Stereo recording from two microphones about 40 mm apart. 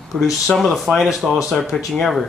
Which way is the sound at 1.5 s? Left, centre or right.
Centre.